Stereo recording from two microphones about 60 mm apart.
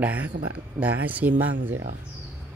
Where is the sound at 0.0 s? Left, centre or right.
Right.